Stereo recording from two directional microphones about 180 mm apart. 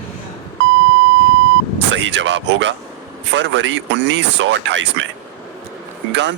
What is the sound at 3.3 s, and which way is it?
Speech, 85° right.